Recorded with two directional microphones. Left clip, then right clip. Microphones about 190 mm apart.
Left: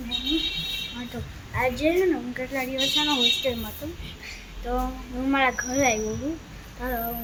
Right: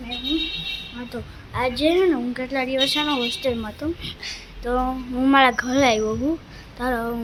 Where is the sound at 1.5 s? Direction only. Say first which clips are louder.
Right 3 dB; 20° right (ahead or behind).